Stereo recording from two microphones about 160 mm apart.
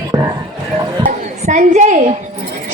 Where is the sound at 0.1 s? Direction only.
20° right (ahead or behind).